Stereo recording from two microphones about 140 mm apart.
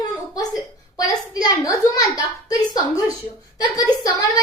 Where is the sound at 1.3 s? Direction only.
25° left (ahead or behind).